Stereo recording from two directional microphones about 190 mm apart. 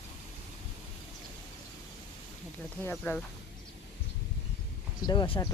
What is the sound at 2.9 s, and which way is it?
Speech, 5° left (ahead or behind).